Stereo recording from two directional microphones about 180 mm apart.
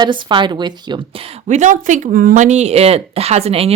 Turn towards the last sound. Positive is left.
turn(degrees=-35)  # may be behind; listen again after turning